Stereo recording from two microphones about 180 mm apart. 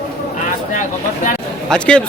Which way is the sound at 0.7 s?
45° left (ahead or behind).